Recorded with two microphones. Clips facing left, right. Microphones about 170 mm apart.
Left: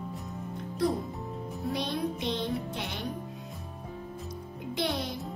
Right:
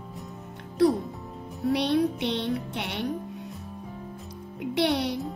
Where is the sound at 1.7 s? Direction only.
70° right (ahead or behind).